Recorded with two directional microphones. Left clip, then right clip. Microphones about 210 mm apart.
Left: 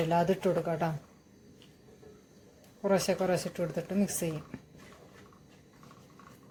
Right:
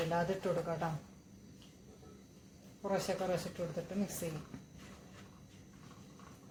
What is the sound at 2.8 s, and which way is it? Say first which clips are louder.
Speech: left 8 dB; 40° left (ahead or behind).